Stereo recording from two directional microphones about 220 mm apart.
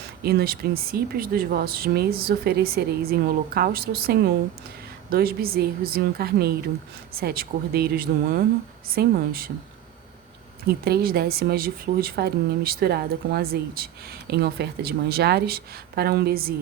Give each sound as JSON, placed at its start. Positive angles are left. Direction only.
{"t": 0.2, "sound": "speech", "side_deg": -45}
{"t": 10.8, "sound": "speech", "side_deg": -45}